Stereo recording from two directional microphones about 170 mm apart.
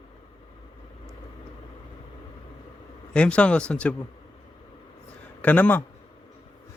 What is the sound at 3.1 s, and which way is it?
Speech, 5° left (ahead or behind).